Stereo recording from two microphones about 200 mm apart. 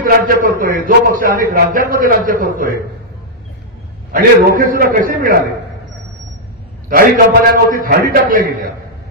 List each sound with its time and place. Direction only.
0.0 s a man's voice: 45° right (ahead or behind)
4.1 s a man's voice: 45° right (ahead or behind)
6.9 s a man's voice: 45° right (ahead or behind)